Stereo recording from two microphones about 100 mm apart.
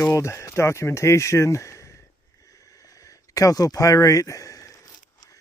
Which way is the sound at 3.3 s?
35° left (ahead or behind).